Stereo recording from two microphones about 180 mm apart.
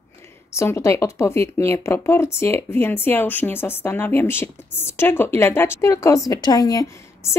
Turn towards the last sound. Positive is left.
turn(degrees=15)  # may be behind; listen again after turning